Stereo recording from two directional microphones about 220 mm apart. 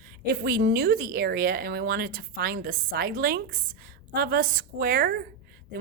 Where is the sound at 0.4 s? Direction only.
45° right (ahead or behind).